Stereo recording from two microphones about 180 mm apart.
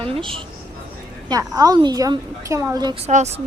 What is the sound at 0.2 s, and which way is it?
A woman's voice, 30° right (ahead or behind).